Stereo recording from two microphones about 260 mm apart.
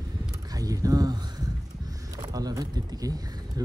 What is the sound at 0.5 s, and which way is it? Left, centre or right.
Boat, centre.